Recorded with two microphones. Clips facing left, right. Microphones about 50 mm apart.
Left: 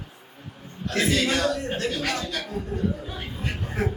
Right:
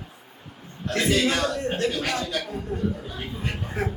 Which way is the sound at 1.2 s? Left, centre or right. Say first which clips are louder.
Even; centre.